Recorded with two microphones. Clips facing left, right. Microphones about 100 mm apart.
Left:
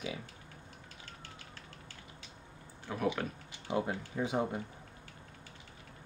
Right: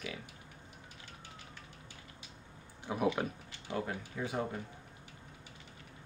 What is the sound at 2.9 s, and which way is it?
Speech, 15° right (ahead or behind).